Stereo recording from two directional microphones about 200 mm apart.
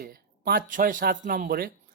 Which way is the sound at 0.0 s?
45° right (ahead or behind).